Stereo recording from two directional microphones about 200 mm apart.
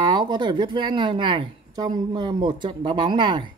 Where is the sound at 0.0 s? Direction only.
20° right (ahead or behind).